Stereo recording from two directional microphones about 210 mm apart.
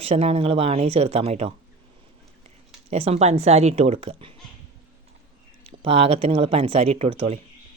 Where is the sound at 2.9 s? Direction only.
30° right (ahead or behind).